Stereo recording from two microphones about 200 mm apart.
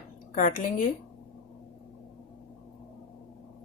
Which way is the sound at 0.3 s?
40° left (ahead or behind).